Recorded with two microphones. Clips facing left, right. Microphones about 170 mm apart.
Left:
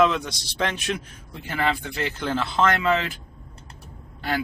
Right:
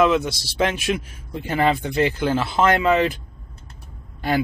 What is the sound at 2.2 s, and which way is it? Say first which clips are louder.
Speech: right 4 dB; 10° right (ahead or behind).